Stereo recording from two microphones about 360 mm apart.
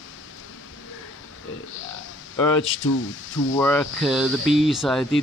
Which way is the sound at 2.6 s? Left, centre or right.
Left.